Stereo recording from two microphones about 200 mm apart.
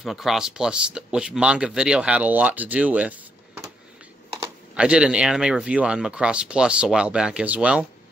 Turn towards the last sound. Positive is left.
turn(degrees=-5)  # may be behind; listen again after turning